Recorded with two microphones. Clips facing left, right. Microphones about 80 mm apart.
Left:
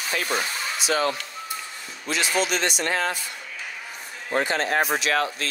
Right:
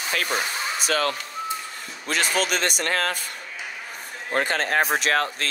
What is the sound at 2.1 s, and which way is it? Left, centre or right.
A man's voice, right.